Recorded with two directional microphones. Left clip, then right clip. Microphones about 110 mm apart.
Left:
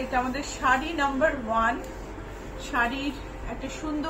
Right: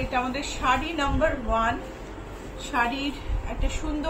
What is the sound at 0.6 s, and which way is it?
A woman's voice, 45° right (ahead or behind).